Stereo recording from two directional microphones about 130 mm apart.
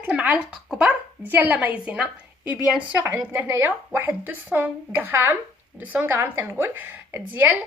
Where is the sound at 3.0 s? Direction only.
20° right (ahead or behind).